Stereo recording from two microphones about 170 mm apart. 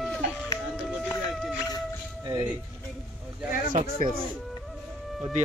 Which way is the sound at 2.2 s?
20° right (ahead or behind).